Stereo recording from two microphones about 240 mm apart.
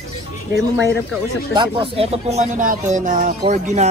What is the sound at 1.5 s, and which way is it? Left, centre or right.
Speech, right.